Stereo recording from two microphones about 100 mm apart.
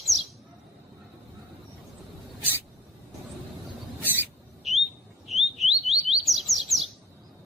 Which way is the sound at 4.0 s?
20° right (ahead or behind).